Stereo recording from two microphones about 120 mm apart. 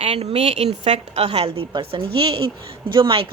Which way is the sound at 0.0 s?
60° right (ahead or behind).